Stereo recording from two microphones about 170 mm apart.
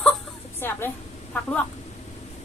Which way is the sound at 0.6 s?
15° left (ahead or behind).